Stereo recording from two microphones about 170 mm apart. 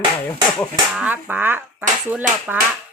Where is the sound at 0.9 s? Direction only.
10° right (ahead or behind).